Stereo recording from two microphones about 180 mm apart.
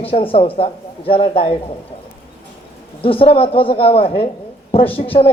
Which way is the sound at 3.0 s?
30° left (ahead or behind).